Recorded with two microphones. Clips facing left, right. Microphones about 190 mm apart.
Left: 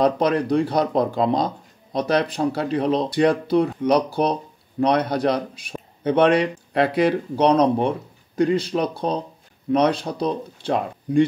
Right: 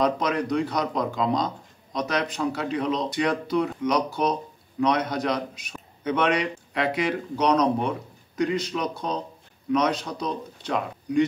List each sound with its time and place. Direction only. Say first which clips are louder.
0.0 s speech: left 5 dB; 30° left (ahead or behind)